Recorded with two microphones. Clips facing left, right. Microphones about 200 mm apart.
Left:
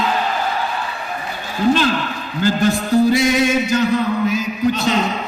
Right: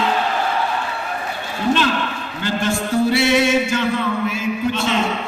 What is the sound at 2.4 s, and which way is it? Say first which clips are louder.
Music: left 4 dB; 40° left (ahead or behind).